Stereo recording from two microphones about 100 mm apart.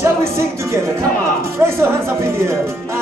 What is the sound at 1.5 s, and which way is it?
Speech, 25° right (ahead or behind).